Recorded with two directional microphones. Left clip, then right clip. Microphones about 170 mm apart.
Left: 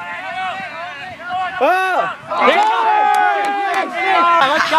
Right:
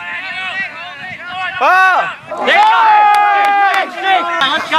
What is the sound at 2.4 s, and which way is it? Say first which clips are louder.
Run: right 5 dB; 10° right (ahead or behind).